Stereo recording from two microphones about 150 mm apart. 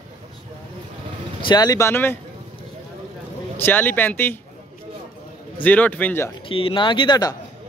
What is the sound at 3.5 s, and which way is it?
Speech, 15° left (ahead or behind).